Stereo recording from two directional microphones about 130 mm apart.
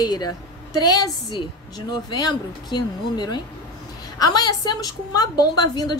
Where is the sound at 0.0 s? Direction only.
30° left (ahead or behind).